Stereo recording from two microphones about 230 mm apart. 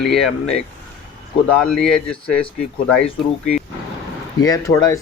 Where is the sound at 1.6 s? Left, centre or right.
Centre.